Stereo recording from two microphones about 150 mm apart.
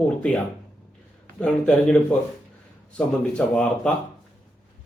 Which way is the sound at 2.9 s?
5° left (ahead or behind).